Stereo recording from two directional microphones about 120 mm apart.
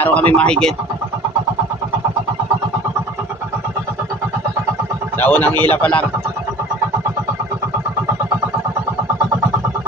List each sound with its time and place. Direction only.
0.0 s a man's voice: 15° left (ahead or behind)
5.2 s a man's voice: 15° left (ahead or behind)